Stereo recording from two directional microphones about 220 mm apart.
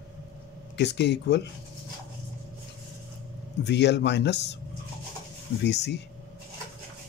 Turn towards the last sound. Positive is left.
turn(degrees=50)  # may be behind; listen again after turning